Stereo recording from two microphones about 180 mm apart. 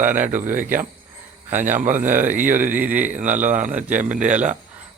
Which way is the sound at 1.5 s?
10° right (ahead or behind).